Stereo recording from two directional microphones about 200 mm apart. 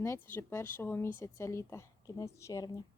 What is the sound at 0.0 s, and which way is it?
Speech, 10° left (ahead or behind).